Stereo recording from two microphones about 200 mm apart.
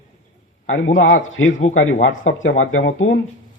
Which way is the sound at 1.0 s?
75° left (ahead or behind).